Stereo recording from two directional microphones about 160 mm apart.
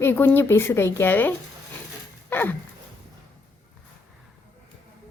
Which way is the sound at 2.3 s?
15° left (ahead or behind).